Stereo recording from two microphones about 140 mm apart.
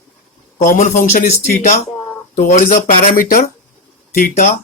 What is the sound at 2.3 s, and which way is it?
Speech, 70° left (ahead or behind).